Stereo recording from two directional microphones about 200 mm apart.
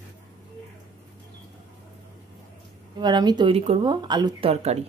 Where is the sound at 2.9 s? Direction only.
20° right (ahead or behind).